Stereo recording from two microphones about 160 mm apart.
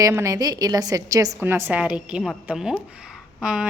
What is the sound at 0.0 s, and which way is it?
A woman's voice, 20° right (ahead or behind).